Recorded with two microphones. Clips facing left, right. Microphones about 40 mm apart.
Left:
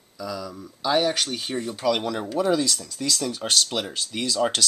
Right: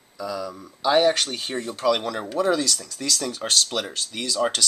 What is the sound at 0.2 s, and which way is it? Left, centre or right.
Speech, centre.